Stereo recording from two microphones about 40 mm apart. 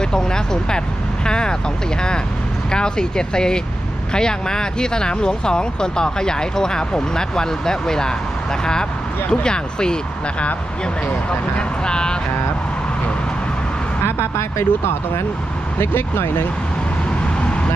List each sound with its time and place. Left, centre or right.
0.0 s speech: centre
1.2 s vehicle: left
2.0 s speech: left
11.5 s speech: left
14.0 s speech: left
15.8 s speech: left